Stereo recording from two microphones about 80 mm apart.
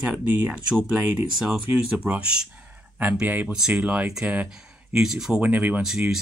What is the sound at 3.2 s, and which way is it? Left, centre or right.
Speech, right.